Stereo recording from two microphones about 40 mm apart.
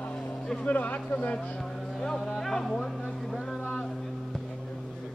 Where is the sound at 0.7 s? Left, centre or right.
Left.